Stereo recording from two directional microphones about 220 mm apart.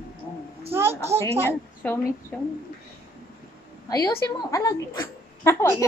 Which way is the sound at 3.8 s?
15° left (ahead or behind).